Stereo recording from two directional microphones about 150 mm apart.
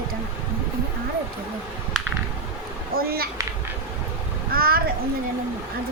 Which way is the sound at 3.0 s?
90° right.